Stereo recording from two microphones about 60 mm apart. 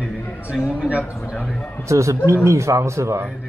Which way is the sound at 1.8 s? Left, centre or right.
Right.